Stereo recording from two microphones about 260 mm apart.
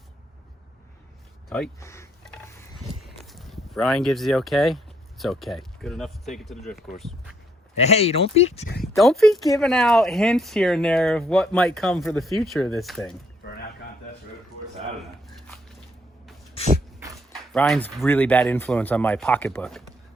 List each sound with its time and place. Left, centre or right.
1.5 s mechanisms: centre
3.0 s speech: centre
7.8 s speech: left
8.8 s speech: centre
13.4 s a sound: left
16.6 s dog: left
17.5 s speech: centre